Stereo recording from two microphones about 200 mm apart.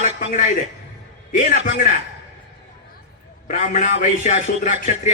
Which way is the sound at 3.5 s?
40° left (ahead or behind).